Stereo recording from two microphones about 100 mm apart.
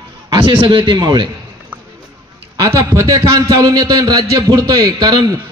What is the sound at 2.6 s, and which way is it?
A man's voice, 30° right (ahead or behind).